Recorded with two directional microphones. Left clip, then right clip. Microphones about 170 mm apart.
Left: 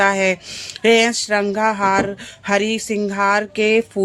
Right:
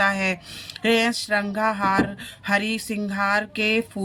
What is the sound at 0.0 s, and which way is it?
Speech, 40° left (ahead or behind).